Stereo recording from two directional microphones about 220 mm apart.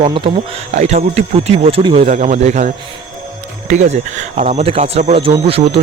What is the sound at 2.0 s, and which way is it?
Speech, 35° right (ahead or behind).